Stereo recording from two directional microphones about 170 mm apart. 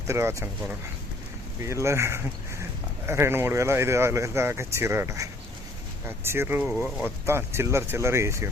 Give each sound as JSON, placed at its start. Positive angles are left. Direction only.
{"t": 0.1, "sound": "speech", "side_deg": -15}
{"t": 1.6, "sound": "speech", "side_deg": -15}